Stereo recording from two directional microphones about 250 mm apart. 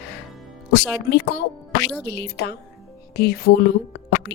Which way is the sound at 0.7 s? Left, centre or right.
Left.